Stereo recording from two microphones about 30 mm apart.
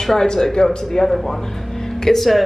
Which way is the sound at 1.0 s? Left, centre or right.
Centre.